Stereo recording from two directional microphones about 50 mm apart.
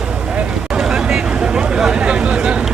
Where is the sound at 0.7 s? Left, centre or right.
Centre.